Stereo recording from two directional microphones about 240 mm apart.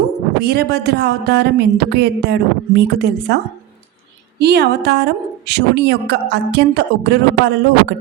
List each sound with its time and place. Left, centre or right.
0.4 s speech: right